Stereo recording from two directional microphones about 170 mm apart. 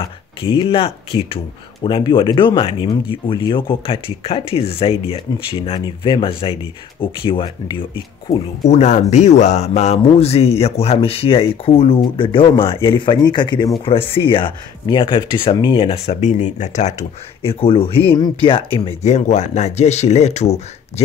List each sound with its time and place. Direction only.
0.4 s speech: 30° left (ahead or behind)
17.4 s speech: 35° left (ahead or behind)